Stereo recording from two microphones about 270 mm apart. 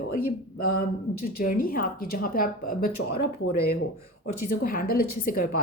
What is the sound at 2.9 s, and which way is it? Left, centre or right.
Speech, left.